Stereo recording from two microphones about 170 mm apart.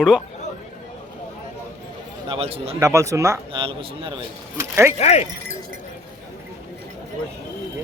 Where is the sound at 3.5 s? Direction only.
30° right (ahead or behind).